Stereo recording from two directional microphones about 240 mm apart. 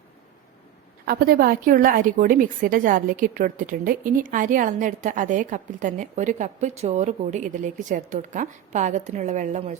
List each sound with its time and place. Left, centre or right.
1.0 s a woman's voice: right